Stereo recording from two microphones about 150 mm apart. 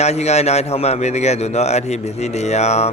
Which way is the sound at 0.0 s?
45° left (ahead or behind).